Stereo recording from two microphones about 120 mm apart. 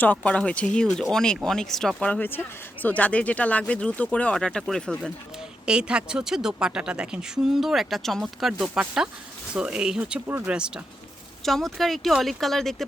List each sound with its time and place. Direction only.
0.0 s a woman's voice: 10° left (ahead or behind); by 10.2 s 5° right (ahead or behind)
10.2 s speech: 20° right (ahead or behind)
10.5 s a woman's voice: 10° right (ahead or behind)